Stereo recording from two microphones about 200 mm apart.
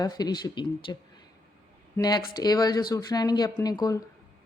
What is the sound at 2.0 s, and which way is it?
A woman's voice, 20° left (ahead or behind).